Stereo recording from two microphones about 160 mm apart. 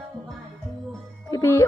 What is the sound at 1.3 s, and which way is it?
Music, 20° left (ahead or behind).